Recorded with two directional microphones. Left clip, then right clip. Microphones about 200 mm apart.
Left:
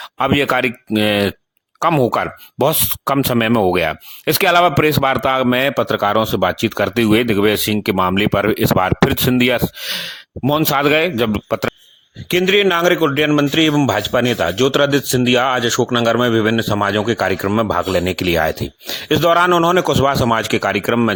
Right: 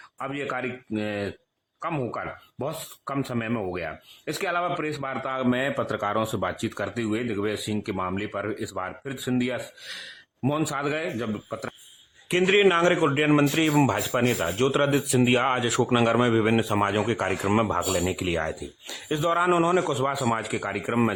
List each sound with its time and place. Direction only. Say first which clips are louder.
0.2 s speech: left 15 dB; 50° left (ahead or behind)
12.3 s a man's voice: left 6 dB; 30° left (ahead or behind)